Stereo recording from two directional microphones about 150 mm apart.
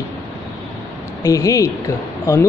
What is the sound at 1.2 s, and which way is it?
Speech, 20° left (ahead or behind).